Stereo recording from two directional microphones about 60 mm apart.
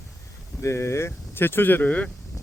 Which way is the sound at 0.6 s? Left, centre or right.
Left.